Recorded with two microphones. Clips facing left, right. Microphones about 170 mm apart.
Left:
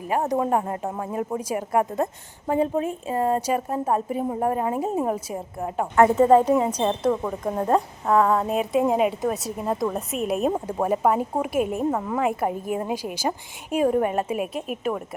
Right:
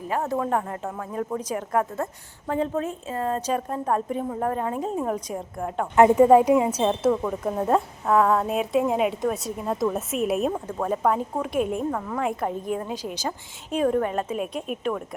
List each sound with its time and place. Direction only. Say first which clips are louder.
0.1 s speech: left 3 dB; 20° left (ahead or behind)
1.4 s a woman's voice: left 2 dB; 10° left (ahead or behind)
6.0 s a woman's voice: right 1 dB; 10° right (ahead or behind)
10.5 s a woman's voice: left 3 dB; 15° left (ahead or behind)
11.9 s a woman's voice: left 3 dB; 15° left (ahead or behind)
12.2 s a woman's voice: left 2 dB; 5° left (ahead or behind)